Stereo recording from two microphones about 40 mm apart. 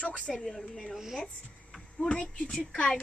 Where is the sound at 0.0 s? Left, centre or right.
Left.